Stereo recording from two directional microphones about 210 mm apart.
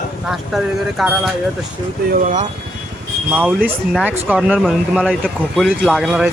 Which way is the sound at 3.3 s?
10° right (ahead or behind).